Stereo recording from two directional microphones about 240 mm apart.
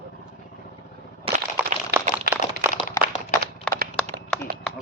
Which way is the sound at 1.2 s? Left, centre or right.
Right.